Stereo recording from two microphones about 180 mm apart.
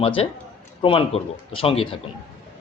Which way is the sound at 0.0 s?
35° left (ahead or behind).